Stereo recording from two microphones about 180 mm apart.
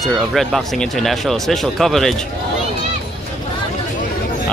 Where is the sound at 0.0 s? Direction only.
Centre (ahead or behind).